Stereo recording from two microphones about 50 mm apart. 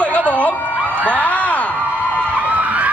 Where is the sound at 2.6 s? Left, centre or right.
Right.